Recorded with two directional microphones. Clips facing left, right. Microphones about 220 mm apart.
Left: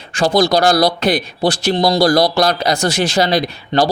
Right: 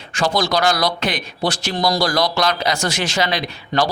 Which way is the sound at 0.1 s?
35° left (ahead or behind).